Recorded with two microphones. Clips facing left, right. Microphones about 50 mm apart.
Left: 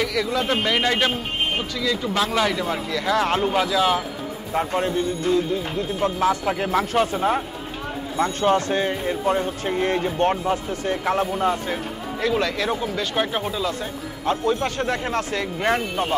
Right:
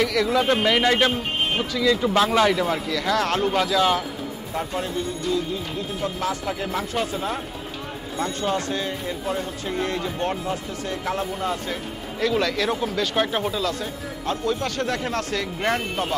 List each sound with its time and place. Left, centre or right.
0.0 s a man's voice: centre
2.9 s speech: centre
4.6 s speech: left
11.7 s speech: centre
14.2 s speech: left